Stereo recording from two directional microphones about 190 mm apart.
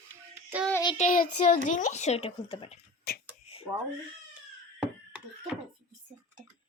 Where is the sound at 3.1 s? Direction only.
55° left (ahead or behind).